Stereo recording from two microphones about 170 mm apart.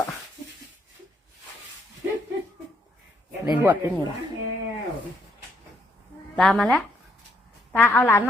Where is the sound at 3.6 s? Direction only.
10° right (ahead or behind).